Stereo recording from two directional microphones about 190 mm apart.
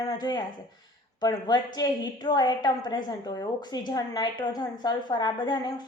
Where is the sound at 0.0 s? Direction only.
20° left (ahead or behind).